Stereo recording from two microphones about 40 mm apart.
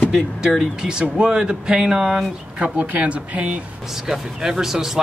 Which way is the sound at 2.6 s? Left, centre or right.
Right.